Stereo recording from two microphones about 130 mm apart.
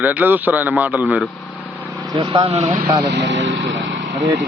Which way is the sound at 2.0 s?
35° right (ahead or behind).